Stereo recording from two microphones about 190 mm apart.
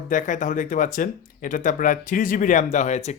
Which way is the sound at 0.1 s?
40° left (ahead or behind).